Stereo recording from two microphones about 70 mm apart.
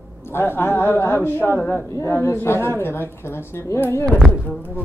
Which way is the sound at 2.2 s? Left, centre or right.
Left.